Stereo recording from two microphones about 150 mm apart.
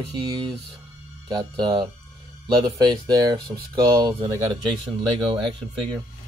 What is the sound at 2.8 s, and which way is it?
Speech, 25° right (ahead or behind).